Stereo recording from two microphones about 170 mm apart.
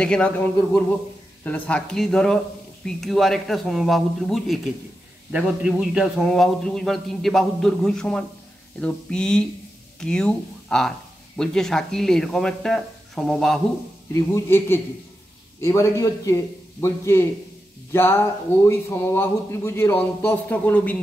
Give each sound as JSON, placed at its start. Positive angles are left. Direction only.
{"t": 0.0, "sound": "speech", "side_deg": 5}
{"t": 14.3, "sound": "speech", "side_deg": 15}